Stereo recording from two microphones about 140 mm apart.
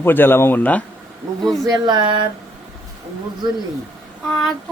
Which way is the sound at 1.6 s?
30° right (ahead or behind).